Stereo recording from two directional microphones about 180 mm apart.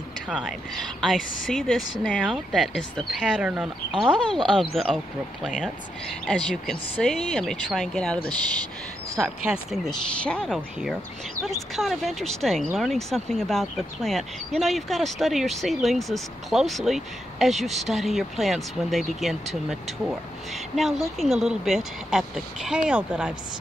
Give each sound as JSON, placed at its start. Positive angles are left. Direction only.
{"t": 0.3, "sound": "speech", "side_deg": 0}
{"t": 9.1, "sound": "speech", "side_deg": -15}
{"t": 10.2, "sound": "speech", "side_deg": 5}